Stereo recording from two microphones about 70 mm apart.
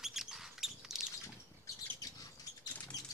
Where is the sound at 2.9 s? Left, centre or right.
Left.